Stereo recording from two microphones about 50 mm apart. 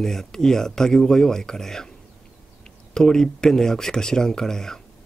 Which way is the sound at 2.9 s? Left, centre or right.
Centre.